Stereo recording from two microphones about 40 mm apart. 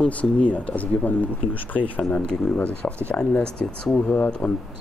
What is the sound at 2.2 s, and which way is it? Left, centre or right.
Speech, left.